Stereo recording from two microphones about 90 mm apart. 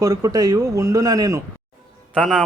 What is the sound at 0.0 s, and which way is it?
A man's voice, 45° right (ahead or behind).